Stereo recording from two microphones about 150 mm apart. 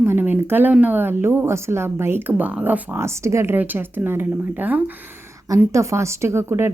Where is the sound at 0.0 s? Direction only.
15° right (ahead or behind).